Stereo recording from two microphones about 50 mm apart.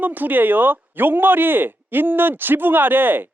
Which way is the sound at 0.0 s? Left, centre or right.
Right.